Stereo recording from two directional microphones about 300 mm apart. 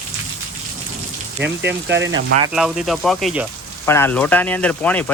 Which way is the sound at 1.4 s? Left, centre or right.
Right.